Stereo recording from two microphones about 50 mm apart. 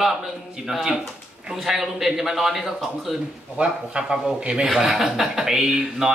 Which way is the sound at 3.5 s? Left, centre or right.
Right.